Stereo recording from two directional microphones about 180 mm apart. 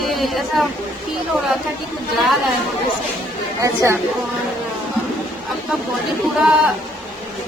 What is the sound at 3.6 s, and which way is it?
Speech, 15° right (ahead or behind).